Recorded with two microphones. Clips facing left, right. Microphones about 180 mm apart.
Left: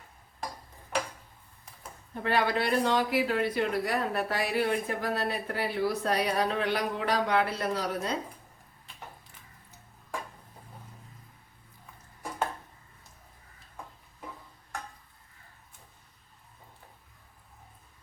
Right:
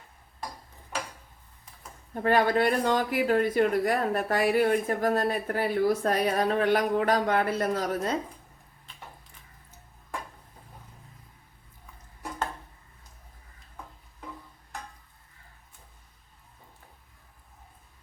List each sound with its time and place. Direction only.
2.2 s speech: 45° right (ahead or behind)